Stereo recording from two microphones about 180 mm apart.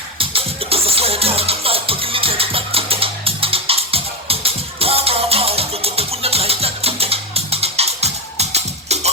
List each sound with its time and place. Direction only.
0.2 s music: 30° right (ahead or behind)